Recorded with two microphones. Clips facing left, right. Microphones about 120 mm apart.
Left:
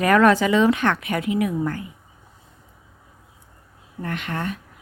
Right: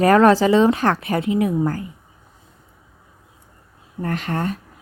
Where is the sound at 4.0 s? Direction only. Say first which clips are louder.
Right 4 dB; 35° right (ahead or behind).